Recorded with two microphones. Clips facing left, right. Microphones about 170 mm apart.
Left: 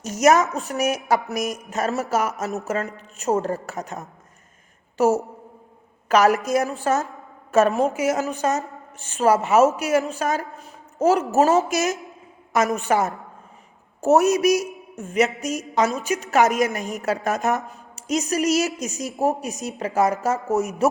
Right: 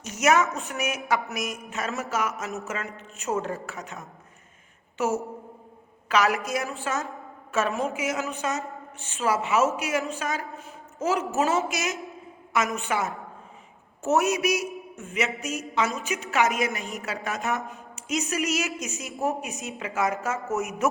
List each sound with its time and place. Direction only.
0.0 s a woman's voice: 40° left (ahead or behind)